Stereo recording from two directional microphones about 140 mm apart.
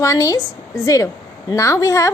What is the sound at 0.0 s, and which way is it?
A woman's voice, 20° left (ahead or behind).